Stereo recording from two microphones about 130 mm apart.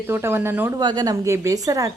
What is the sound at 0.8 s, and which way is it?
A woman's voice, 30° right (ahead or behind).